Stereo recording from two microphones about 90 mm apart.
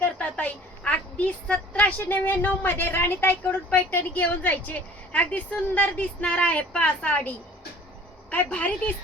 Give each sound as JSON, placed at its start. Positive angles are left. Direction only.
{"t": 0.0, "sound": "a woman's voice", "side_deg": 15}
{"t": 8.4, "sound": "a woman's voice", "side_deg": 15}